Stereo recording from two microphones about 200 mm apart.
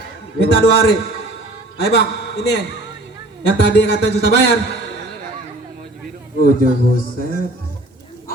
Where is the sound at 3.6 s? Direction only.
60° left (ahead or behind).